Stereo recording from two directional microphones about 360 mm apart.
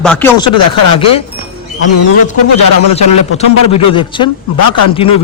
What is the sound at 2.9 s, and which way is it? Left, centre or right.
Speech, centre.